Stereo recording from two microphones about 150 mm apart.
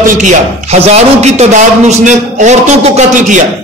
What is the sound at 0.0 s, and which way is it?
A man's voice, 55° right (ahead or behind).